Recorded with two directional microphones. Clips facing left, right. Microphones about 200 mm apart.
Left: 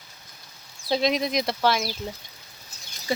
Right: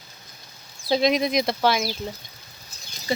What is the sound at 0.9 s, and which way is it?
Speech, centre (ahead or behind).